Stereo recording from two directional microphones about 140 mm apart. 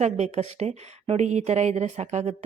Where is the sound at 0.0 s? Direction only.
50° right (ahead or behind).